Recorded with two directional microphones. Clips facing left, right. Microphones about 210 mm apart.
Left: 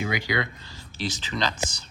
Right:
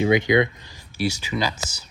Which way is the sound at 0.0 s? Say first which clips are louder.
Right 10 dB; 20° right (ahead or behind).